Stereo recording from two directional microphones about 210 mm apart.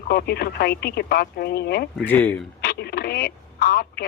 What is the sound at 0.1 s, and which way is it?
Speech, 50° left (ahead or behind).